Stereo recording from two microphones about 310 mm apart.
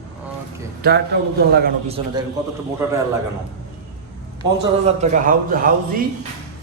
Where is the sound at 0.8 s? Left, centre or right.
Right.